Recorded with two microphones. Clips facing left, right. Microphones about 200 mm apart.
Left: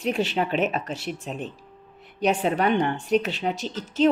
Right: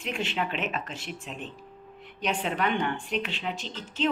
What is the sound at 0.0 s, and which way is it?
Speech, 35° left (ahead or behind).